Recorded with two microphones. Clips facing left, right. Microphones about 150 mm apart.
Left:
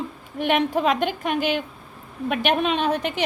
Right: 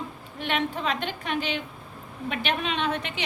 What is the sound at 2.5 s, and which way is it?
Speech, 40° left (ahead or behind).